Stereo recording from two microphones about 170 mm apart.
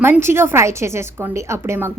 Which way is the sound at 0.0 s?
15° right (ahead or behind).